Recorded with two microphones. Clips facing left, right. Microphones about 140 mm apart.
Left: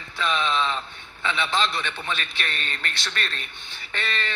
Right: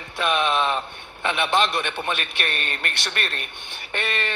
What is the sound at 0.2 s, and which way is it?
A man's voice, 60° right (ahead or behind).